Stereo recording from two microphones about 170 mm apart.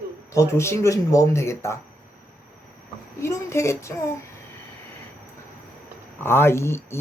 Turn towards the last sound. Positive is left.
turn(degrees=15)  # may be behind; listen again after turning